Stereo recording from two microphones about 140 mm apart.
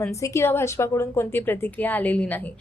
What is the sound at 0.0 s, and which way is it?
A woman's voice, 20° left (ahead or behind).